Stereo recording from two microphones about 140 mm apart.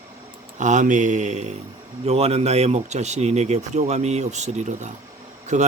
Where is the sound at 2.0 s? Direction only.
50° right (ahead or behind).